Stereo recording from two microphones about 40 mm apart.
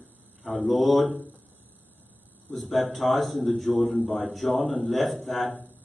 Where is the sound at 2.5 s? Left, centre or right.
Centre.